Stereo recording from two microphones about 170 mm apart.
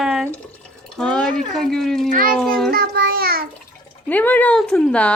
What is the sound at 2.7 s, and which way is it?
Child singing, 65° right (ahead or behind).